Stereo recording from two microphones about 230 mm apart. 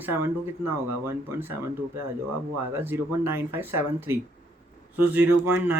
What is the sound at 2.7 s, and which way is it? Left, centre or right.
Speech, centre.